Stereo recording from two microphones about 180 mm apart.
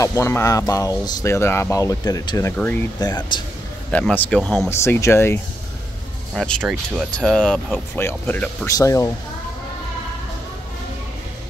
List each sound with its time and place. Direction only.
0.0 s speech: 15° left (ahead or behind)
3.0 s speech: 20° left (ahead or behind)
3.9 s speech: 10° left (ahead or behind)